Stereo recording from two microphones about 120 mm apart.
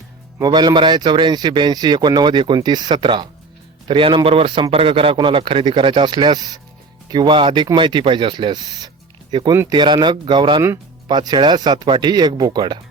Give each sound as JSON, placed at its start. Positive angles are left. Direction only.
{"t": 0.3, "sound": "speech", "side_deg": -35}